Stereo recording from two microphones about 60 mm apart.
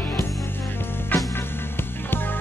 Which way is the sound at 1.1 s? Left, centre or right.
Left.